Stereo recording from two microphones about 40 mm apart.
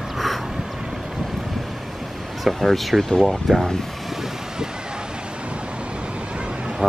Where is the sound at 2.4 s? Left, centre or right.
Centre.